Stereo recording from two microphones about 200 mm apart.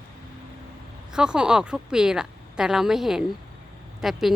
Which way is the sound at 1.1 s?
5° right (ahead or behind).